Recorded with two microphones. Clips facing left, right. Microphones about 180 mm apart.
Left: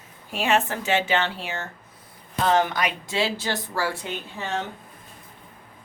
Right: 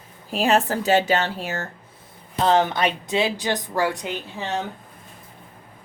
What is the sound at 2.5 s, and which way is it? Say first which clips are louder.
Speech: right 3 dB; 25° right (ahead or behind).